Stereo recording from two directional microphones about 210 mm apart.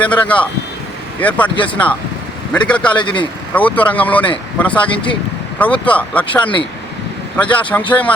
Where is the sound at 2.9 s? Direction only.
25° left (ahead or behind).